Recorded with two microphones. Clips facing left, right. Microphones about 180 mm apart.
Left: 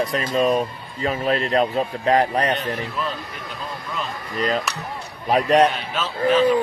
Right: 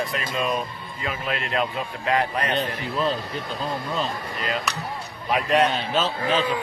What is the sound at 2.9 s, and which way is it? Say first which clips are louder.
A man's voice: right 3 dB; 30° right (ahead or behind).